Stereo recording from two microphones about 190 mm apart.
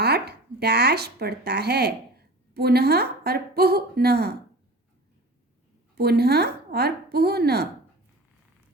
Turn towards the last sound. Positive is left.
turn(degrees=-55)  # may be behind; listen again after turning